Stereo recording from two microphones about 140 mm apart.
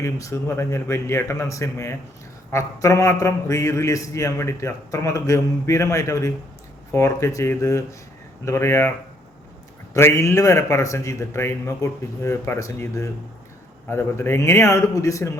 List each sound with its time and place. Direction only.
0.0 s a man's voice: 20° left (ahead or behind)
9.9 s a man's voice: 20° left (ahead or behind)